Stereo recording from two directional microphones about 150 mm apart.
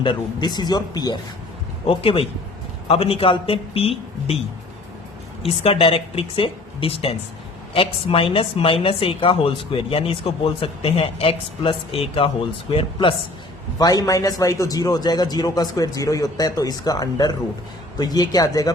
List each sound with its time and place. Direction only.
0.0 s a man's voice: 30° left (ahead or behind)
1.9 s a woman's voice: 40° left (ahead or behind)
5.6 s a woman's voice: 40° left (ahead or behind); by 18.7 s 25° left (ahead or behind)